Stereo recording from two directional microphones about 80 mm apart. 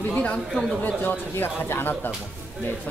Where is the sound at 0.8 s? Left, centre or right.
Left.